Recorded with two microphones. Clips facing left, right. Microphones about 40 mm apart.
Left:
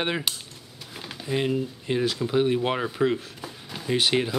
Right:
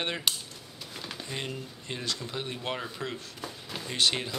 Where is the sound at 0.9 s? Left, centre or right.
Centre.